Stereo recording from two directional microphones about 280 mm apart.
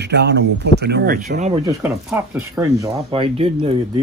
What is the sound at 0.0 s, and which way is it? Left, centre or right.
Speech, right.